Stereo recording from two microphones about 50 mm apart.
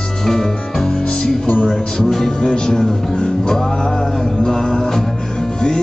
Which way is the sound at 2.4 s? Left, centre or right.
Centre.